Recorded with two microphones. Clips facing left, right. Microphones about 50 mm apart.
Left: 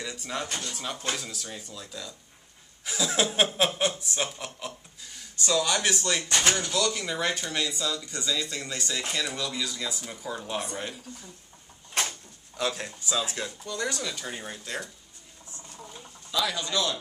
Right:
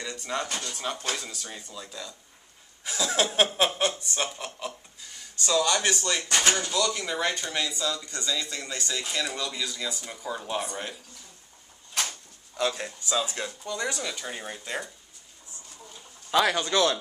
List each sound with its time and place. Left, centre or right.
0.0 s speech: centre
6.3 s speech: centre
6.7 s speech: centre
12.0 s a sound: left
12.5 s speech: centre
16.3 s a man's voice: right